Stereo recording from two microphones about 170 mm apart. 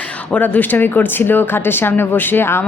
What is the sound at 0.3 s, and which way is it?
A man's voice, 10° left (ahead or behind).